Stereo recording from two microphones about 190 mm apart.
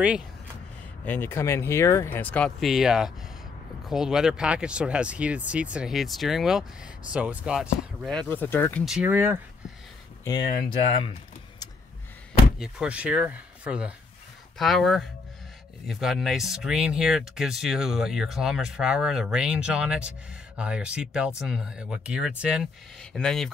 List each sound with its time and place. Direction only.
1.0 s speech: 10° left (ahead or behind)
8.8 s speech: 5° right (ahead or behind)
10.2 s speech: 20° left (ahead or behind)
12.5 s speech: 5° right (ahead or behind)